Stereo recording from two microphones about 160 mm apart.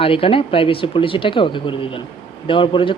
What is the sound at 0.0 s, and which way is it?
Speech, 35° left (ahead or behind).